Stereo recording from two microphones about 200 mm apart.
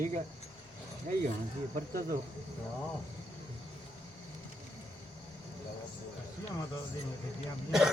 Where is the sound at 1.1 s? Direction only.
40° right (ahead or behind).